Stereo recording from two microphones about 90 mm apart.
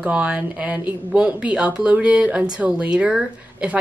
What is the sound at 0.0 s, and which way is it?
Speech, 15° right (ahead or behind).